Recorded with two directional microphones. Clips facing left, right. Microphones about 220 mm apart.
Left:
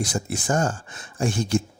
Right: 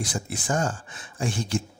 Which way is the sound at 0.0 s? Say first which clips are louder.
Left 4 dB; 40° left (ahead or behind).